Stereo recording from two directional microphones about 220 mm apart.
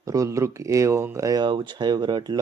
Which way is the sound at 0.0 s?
15° right (ahead or behind).